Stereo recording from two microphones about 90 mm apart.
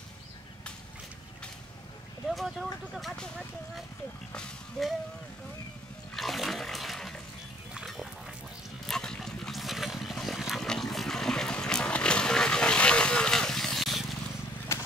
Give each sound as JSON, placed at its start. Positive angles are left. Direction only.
{"t": 2.2, "sound": "speech", "side_deg": 0}
{"t": 6.1, "sound": "water", "side_deg": 0}
{"t": 7.7, "sound": "pig", "side_deg": -5}
{"t": 8.8, "sound": "a sound", "side_deg": 5}
{"t": 14.7, "sound": "horse", "side_deg": 30}